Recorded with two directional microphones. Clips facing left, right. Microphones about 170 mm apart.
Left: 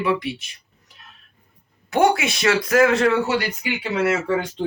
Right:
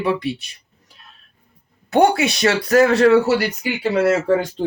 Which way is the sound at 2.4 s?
35° right (ahead or behind).